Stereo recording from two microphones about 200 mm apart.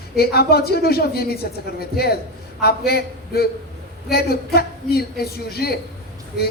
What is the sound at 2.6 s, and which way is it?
A woman's voice, 50° left (ahead or behind).